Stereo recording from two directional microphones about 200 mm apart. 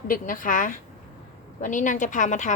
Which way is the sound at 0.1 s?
40° left (ahead or behind).